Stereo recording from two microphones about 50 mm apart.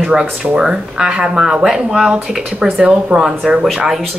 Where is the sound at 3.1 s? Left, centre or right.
Right.